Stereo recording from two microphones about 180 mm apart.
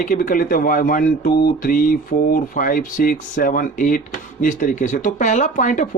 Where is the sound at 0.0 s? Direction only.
50° left (ahead or behind).